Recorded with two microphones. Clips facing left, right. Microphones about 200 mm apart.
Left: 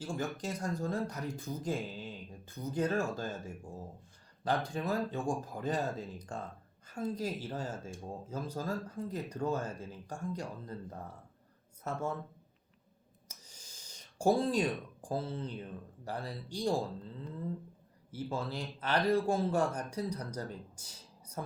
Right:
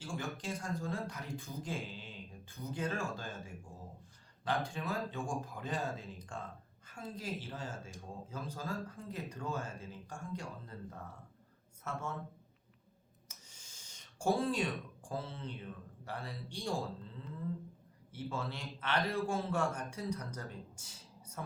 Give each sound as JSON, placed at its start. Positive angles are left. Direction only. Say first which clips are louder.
{"t": 0.0, "sound": "speech", "louder": "left 4 dB", "side_deg": 40}
{"t": 11.8, "sound": "speech", "louder": "left 5 dB", "side_deg": 35}
{"t": 13.2, "sound": "a sound", "louder": "left 4 dB", "side_deg": 40}
{"t": 14.2, "sound": "speech", "louder": "left 4 dB", "side_deg": 35}
{"t": 18.1, "sound": "speech", "louder": "left 3 dB", "side_deg": 35}